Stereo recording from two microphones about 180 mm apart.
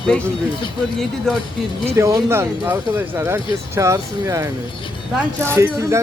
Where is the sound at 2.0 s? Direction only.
15° right (ahead or behind).